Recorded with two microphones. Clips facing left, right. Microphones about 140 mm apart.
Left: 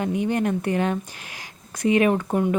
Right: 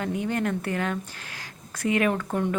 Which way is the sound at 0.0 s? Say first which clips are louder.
Left 4 dB; 20° left (ahead or behind).